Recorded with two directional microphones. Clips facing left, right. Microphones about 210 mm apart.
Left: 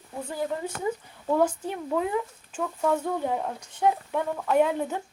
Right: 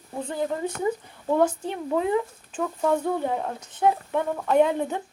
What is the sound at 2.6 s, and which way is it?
Speech, 5° right (ahead or behind).